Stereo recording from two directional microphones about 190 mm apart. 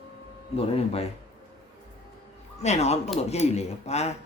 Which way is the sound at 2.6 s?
35° left (ahead or behind).